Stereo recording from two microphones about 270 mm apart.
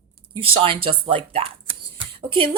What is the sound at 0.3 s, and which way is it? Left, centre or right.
A woman's voice, centre.